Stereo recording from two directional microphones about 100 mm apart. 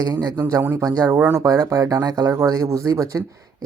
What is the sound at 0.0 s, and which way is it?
Speech, 40° right (ahead or behind).